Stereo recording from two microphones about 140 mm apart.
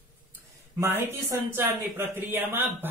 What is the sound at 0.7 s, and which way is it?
Speech, 20° right (ahead or behind).